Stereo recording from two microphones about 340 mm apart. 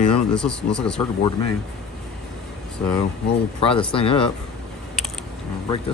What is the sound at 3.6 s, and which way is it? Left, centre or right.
Speech, centre.